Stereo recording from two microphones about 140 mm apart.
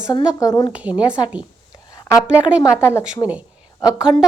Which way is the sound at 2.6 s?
20° left (ahead or behind).